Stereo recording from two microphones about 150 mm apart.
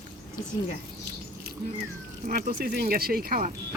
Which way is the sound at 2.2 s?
65° right (ahead or behind).